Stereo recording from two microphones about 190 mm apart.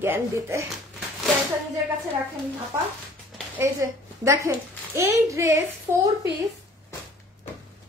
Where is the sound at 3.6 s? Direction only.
15° right (ahead or behind).